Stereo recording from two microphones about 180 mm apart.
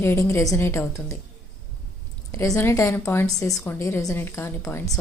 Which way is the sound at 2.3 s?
15° left (ahead or behind).